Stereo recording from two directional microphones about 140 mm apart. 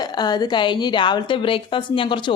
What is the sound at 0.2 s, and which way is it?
A woman's voice, 30° left (ahead or behind).